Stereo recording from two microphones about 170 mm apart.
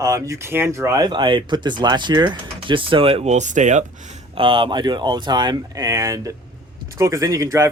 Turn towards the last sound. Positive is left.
turn(degrees=-15)  # may be behind; listen again after turning